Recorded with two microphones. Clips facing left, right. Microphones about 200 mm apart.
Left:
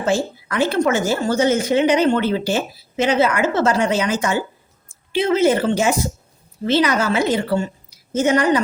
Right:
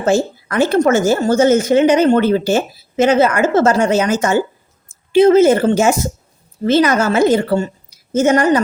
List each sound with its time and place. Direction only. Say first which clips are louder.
0.0 s a woman's voice: right 5 dB; 45° right (ahead or behind)